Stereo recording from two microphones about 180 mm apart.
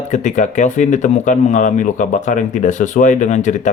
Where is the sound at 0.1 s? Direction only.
45° left (ahead or behind).